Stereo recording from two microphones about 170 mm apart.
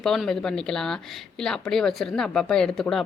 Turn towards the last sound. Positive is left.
turn(degrees=5)  # may be behind; listen again after turning